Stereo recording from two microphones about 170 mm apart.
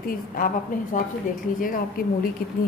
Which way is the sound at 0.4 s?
55° left (ahead or behind).